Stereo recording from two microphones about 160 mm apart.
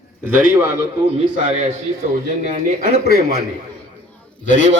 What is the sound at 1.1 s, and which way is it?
Speech, 40° right (ahead or behind).